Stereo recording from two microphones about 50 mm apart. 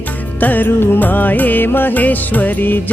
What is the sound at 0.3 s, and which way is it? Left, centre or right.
Music, left.